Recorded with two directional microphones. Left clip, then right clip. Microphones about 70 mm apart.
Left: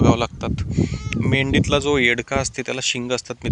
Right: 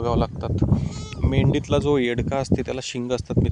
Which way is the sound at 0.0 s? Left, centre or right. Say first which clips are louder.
Left 5 dB; right.